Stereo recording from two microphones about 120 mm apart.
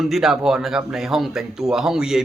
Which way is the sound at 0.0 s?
5° right (ahead or behind).